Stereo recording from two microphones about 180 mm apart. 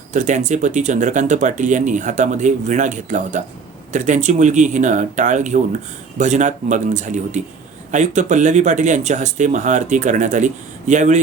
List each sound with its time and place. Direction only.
0.1 s speech: 40° right (ahead or behind)